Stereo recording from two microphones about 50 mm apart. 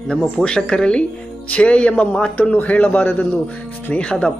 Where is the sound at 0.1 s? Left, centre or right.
Centre.